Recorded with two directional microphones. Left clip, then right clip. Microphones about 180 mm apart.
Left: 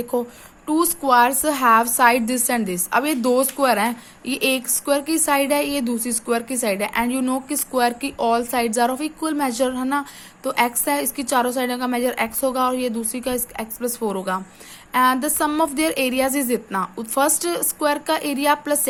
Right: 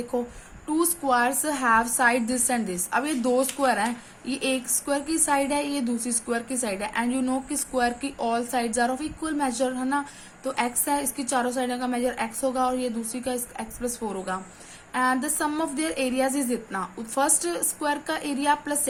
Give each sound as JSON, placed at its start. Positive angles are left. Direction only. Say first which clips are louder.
{"t": 0.7, "sound": "a woman's voice", "louder": "left 6 dB", "side_deg": 50}